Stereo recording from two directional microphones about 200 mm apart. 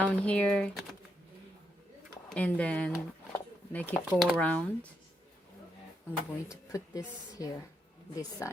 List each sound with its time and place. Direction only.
0.0 s speech: 5° left (ahead or behind)
2.3 s speech: 5° left (ahead or behind)
6.7 s a woman's voice: 15° left (ahead or behind)